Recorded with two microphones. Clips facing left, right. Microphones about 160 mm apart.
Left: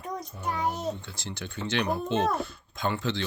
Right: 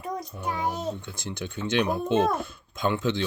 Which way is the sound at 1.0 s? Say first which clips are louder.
Right 4 dB; 55° right (ahead or behind).